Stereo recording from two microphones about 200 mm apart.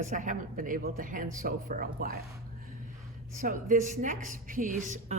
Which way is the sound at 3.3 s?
40° right (ahead or behind).